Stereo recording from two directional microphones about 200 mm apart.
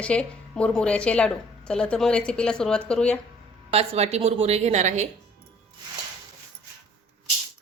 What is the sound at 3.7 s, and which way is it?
A woman's voice, 30° right (ahead or behind).